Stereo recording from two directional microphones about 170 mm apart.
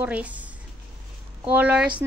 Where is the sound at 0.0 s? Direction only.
10° right (ahead or behind).